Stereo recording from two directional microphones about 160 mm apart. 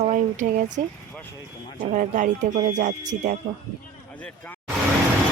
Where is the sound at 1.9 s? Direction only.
55° right (ahead or behind).